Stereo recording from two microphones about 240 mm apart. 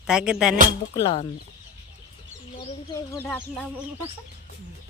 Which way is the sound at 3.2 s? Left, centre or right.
Centre.